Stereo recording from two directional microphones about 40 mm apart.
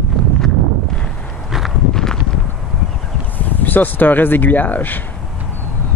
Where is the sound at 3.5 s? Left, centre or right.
Left.